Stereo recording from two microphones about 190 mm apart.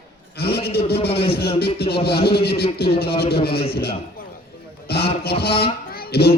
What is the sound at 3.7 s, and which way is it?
Speech, 55° left (ahead or behind).